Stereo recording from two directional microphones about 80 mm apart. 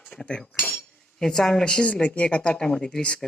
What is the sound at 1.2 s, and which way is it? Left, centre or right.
Speech, centre.